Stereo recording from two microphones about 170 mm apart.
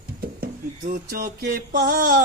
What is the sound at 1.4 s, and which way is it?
Music, 75° right (ahead or behind).